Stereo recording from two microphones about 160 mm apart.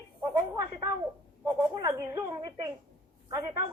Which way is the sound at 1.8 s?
25° right (ahead or behind).